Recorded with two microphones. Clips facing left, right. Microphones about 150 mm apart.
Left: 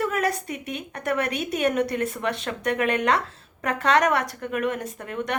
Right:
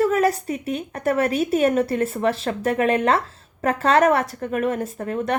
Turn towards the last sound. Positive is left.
turn(degrees=-35)  # may be behind; listen again after turning